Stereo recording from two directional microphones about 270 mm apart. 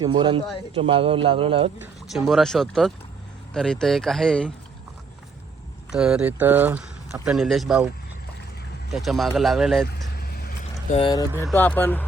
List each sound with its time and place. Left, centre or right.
0.0 s a man's voice: centre
2.1 s speech: centre
5.9 s speech: centre
8.9 s speech: centre
9.8 s vehicle: left
10.9 s speech: centre